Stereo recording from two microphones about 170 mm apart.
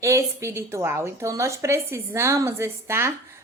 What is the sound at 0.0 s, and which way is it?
Speech, 20° right (ahead or behind).